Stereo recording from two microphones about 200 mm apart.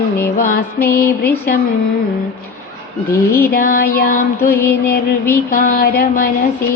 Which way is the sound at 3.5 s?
45° left (ahead or behind).